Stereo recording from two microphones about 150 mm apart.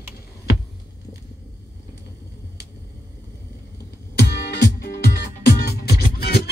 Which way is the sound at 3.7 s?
90° left.